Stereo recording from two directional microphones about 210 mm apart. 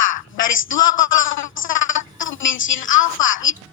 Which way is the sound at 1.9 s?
70° left (ahead or behind).